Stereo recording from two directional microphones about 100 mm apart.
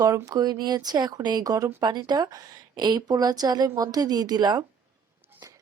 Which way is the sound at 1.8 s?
45° right (ahead or behind).